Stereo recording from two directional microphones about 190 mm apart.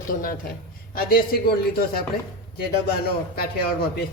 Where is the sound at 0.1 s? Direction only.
45° left (ahead or behind).